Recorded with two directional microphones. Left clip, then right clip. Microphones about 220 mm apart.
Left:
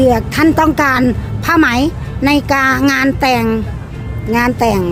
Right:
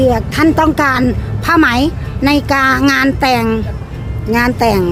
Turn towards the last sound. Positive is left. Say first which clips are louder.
# right 1 dB
turn(degrees=-5)  # may be behind; listen again after turning